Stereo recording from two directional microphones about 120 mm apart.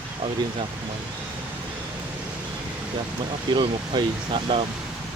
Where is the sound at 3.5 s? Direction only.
40° right (ahead or behind).